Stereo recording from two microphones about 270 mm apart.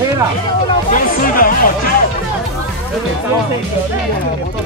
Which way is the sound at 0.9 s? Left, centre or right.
Left.